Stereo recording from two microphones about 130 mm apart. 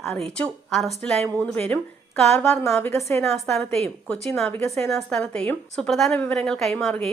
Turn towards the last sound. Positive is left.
turn(degrees=5)  # may be behind; listen again after turning